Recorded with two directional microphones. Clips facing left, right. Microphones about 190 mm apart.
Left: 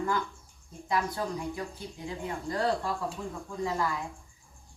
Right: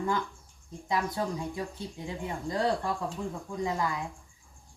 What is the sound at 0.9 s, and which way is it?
Speech, 20° right (ahead or behind).